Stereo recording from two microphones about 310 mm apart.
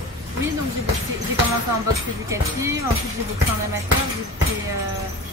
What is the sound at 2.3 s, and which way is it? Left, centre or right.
Speech, centre.